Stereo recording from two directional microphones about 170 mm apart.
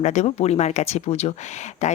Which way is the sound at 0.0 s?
45° left (ahead or behind).